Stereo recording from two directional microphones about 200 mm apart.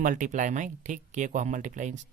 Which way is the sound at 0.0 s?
40° right (ahead or behind).